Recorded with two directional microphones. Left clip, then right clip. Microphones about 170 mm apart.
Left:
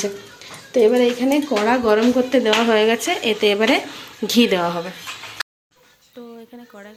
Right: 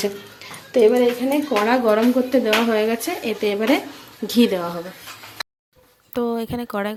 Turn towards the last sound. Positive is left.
turn(degrees=-60)  # may be behind; listen again after turning